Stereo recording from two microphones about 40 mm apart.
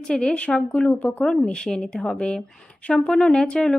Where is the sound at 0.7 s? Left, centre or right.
Left.